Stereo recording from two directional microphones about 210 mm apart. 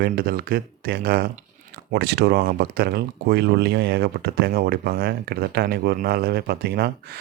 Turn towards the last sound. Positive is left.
turn(degrees=-50)  # may be behind; listen again after turning